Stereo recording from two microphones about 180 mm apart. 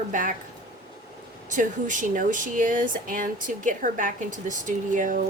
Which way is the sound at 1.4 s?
45° right (ahead or behind).